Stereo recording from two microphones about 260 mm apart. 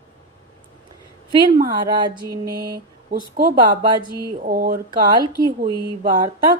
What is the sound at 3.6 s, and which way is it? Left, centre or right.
Speech, centre.